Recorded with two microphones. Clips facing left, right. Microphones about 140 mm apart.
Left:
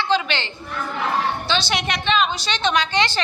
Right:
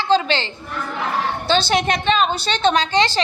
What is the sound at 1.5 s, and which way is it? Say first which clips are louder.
A woman's voice: right 5 dB; 50° right (ahead or behind).